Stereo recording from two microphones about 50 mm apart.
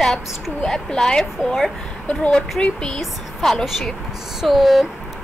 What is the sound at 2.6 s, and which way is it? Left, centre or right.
A woman's voice, centre.